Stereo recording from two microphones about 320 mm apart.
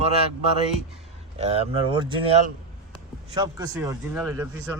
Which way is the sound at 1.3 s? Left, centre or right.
Centre.